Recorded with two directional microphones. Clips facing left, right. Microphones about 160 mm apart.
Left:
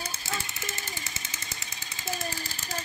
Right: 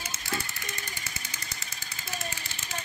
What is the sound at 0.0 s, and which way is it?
Jackhammer, 30° left (ahead or behind).